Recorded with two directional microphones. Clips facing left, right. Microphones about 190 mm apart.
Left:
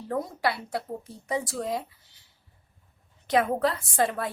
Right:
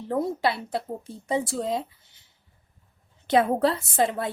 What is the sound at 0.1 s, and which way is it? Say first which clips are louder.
A woman's voice: right 3 dB; 25° right (ahead or behind).